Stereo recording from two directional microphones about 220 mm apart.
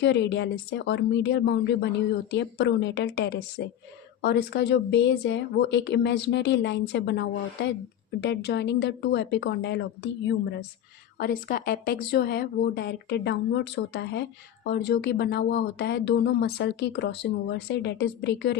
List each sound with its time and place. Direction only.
0.0 s speech: 50° left (ahead or behind)
11.2 s speech: 40° left (ahead or behind)